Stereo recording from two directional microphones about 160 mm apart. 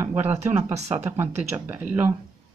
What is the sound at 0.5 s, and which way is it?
Speech, 45° right (ahead or behind).